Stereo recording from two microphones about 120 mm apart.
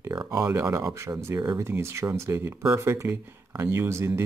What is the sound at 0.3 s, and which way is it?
Speech, 25° right (ahead or behind).